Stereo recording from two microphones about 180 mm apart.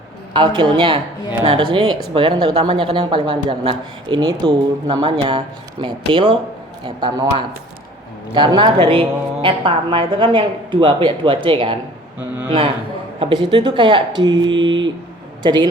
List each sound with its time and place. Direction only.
0.3 s speech: 25° right (ahead or behind)
13.1 s speech: 25° right (ahead or behind)